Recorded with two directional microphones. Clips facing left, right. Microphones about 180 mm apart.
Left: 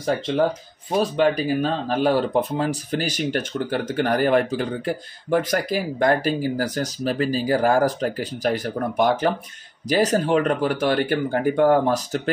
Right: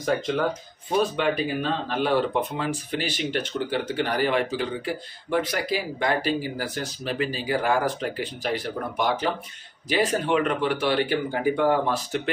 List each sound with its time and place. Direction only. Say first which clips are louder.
1.1 s speech: left 5 dB; 40° left (ahead or behind)